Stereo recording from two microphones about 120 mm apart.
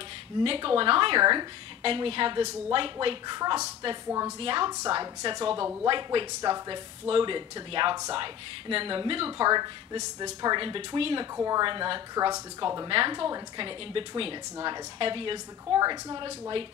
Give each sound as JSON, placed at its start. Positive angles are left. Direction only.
{"t": 0.4, "sound": "a woman's voice", "side_deg": -45}
{"t": 3.3, "sound": "speech", "side_deg": -30}
{"t": 4.4, "sound": "a woman's voice", "side_deg": -40}
{"t": 9.5, "sound": "speech", "side_deg": -35}
{"t": 11.3, "sound": "speech", "side_deg": -30}